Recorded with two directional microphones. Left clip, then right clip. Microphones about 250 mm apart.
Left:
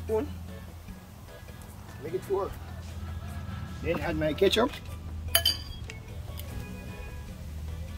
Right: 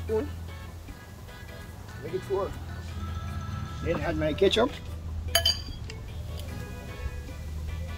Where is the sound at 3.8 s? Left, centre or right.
Left.